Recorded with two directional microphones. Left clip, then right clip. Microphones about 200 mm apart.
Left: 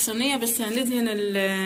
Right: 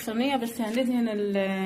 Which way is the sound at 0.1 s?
30° right (ahead or behind).